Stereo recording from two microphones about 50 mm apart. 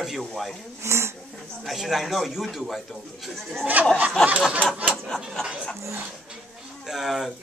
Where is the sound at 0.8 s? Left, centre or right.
Right.